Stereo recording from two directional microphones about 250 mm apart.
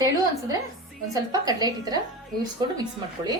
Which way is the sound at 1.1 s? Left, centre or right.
Centre.